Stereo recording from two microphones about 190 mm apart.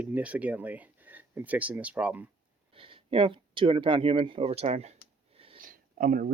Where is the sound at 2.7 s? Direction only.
30° right (ahead or behind).